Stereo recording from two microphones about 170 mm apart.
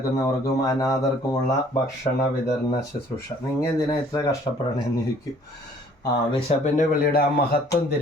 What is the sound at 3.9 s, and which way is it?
Speech, 20° left (ahead or behind).